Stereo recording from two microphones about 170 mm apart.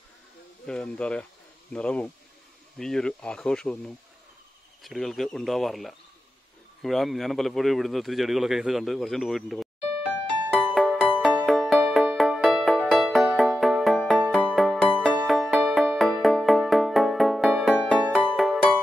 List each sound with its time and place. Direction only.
0.7 s speech: 5° left (ahead or behind)
4.8 s speech: centre (ahead or behind)
10.5 s music: centre (ahead or behind)